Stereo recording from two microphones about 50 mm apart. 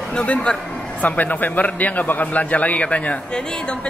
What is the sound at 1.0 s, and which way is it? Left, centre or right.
A man's voice, left.